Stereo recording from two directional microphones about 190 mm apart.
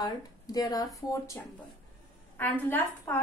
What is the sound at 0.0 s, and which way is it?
A woman's voice, 20° left (ahead or behind).